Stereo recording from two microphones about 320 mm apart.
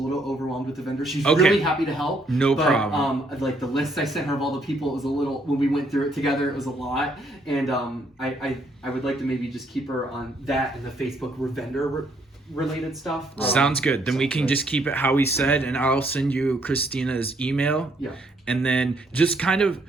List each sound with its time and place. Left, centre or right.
0.1 s a man's voice: centre
11.0 s a man's voice: centre